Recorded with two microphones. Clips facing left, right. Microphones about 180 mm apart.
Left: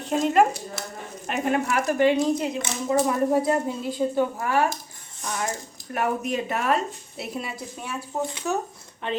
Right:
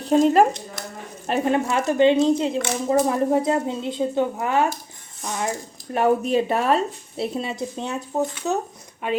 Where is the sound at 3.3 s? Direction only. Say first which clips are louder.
Right 2 dB; 20° right (ahead or behind).